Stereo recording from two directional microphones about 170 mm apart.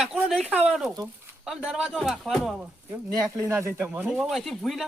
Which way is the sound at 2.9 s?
15° right (ahead or behind).